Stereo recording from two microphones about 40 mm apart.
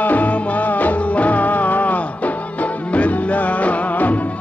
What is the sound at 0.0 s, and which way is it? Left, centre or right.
Music, left.